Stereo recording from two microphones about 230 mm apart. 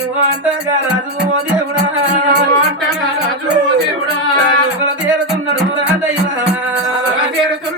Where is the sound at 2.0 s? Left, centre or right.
Right.